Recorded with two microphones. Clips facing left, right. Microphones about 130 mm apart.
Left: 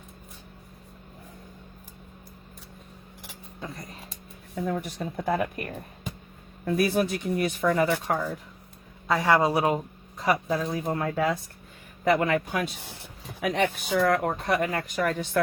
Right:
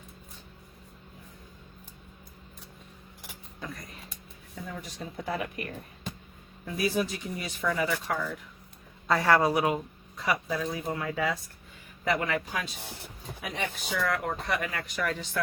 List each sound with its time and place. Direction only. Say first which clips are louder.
3.6 s speech: left 2 dB; 30° left (ahead or behind)
4.6 s speech: left 9 dB; 55° left (ahead or behind)
6.7 s speech: left 5 dB; 55° left (ahead or behind)
9.0 s a man's voice: left 1 dB; 15° left (ahead or behind)
9.5 s speech: left 2 dB; 30° left (ahead or behind); by 12.7 s 55° left (ahead or behind)
13.4 s speech: left 9 dB; 70° left (ahead or behind); by 15.4 s 55° left (ahead or behind)